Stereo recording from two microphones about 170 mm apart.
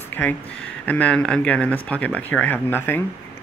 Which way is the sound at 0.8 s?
10° left (ahead or behind).